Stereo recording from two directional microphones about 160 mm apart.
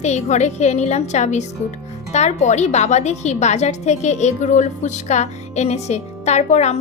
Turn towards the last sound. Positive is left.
turn(degrees=45)  # may be behind; listen again after turning